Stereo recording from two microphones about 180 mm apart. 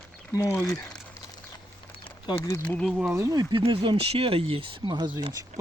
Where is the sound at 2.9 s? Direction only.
5° right (ahead or behind).